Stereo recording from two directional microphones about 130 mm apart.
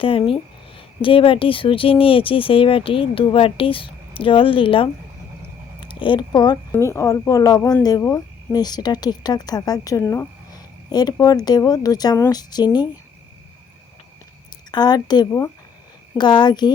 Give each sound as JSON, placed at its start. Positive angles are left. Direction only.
{"t": 0.0, "sound": "speech", "side_deg": 45}
{"t": 5.9, "sound": "speech", "side_deg": 40}
{"t": 6.7, "sound": "speech", "side_deg": 20}
{"t": 14.7, "sound": "speech", "side_deg": 30}